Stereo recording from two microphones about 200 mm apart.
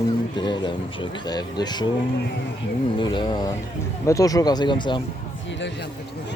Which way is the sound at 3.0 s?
25° left (ahead or behind).